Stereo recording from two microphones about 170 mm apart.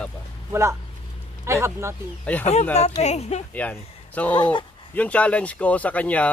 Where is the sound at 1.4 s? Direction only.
15° right (ahead or behind).